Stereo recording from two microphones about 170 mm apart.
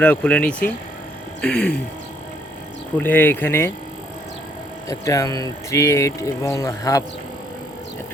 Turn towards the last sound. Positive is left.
turn(degrees=20)  # may be behind; listen again after turning